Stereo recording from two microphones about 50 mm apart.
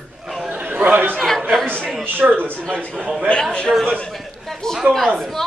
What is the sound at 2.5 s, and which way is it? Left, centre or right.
A man's voice, centre.